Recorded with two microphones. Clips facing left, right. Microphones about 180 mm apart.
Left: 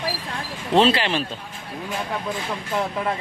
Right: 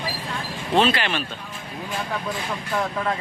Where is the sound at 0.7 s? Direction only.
30° left (ahead or behind).